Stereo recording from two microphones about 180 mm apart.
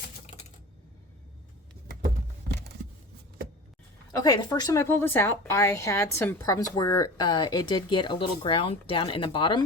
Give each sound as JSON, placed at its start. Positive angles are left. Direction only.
{"t": 4.1, "sound": "speech", "side_deg": 20}